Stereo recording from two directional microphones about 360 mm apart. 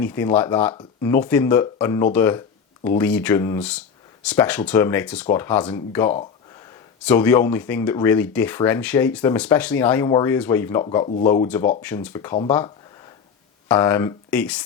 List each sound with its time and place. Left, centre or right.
0.0 s speech: centre